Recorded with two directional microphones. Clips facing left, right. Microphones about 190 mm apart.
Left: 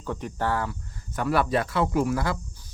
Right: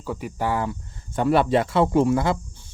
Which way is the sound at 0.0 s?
5° right (ahead or behind).